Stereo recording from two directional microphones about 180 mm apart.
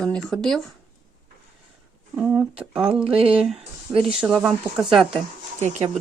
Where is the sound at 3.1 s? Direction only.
30° right (ahead or behind).